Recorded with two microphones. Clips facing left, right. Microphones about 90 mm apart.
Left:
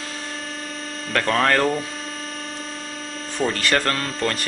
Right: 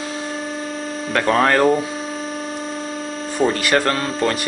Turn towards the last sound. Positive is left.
turn(degrees=-15)  # may be behind; listen again after turning